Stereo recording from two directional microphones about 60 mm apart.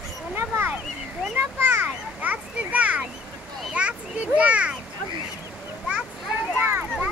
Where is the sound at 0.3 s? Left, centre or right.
Right.